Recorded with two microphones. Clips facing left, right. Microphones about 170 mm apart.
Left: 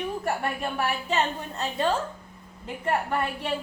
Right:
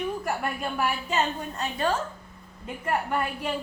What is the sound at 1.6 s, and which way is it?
Speech, 30° left (ahead or behind).